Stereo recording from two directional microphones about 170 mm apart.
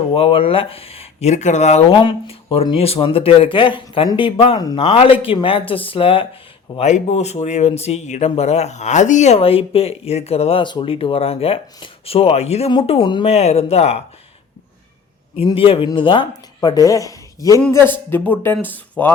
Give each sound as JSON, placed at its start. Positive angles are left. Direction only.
{"t": 0.1, "sound": "speech", "side_deg": 30}
{"t": 1.9, "sound": "speech", "side_deg": 30}
{"t": 6.7, "sound": "speech", "side_deg": 40}
{"t": 15.4, "sound": "speech", "side_deg": 35}